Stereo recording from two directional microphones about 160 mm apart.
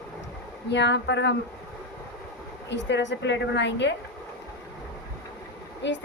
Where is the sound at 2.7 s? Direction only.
90° left.